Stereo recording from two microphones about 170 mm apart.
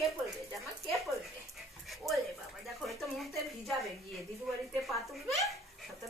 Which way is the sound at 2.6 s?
Centre (ahead or behind).